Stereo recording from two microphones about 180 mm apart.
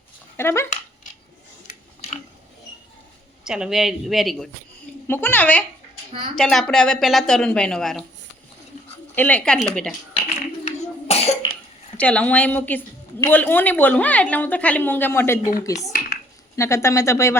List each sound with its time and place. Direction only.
0.3 s a woman's voice: 15° left (ahead or behind)
3.4 s speech: 5° right (ahead or behind)
5.0 s a woman's voice: 10° left (ahead or behind)
9.1 s speech: 10° left (ahead or behind)
10.7 s cough: 35° left (ahead or behind)
11.9 s a woman's voice: 5° left (ahead or behind)